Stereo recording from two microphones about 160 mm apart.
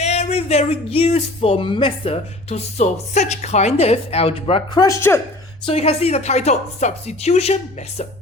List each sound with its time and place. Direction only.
0.0 s speech: 40° left (ahead or behind); by 5.2 s 15° left (ahead or behind)
5.6 s speech: 40° left (ahead or behind)